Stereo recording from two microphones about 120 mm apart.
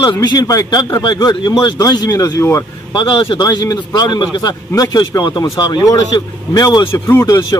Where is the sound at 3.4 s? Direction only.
35° left (ahead or behind).